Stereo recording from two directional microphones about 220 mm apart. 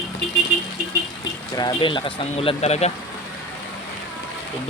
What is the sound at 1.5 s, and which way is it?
Speech, 20° left (ahead or behind).